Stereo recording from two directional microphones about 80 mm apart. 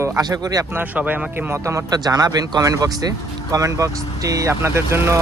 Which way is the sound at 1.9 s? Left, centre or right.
Right.